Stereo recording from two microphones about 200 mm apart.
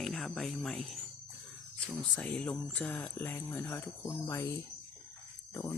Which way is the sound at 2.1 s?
5° left (ahead or behind).